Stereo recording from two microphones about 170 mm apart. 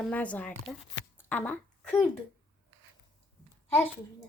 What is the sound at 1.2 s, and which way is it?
Shuffling cards, 10° left (ahead or behind).